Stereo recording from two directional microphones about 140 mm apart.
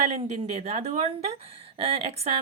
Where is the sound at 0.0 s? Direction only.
55° right (ahead or behind).